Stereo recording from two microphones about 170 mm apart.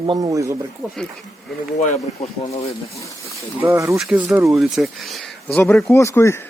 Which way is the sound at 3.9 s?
Centre (ahead or behind).